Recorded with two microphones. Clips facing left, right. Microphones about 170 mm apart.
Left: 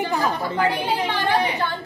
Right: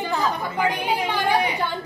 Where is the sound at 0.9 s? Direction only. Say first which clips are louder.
Even; 10° right (ahead or behind).